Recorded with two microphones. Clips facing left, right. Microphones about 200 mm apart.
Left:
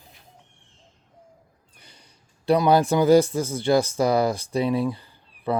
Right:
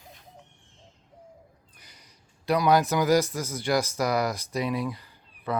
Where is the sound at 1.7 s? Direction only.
30° left (ahead or behind).